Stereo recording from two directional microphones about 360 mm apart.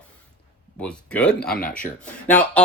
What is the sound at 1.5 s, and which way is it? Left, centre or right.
Speech, left.